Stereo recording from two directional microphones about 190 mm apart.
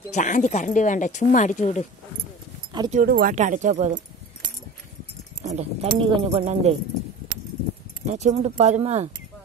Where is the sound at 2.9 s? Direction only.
50° right (ahead or behind).